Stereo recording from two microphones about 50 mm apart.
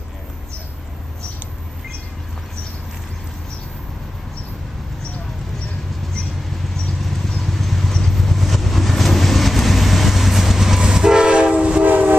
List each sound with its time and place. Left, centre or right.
7.0 s vehicle: centre; by 11.9 s right
11.9 s train: right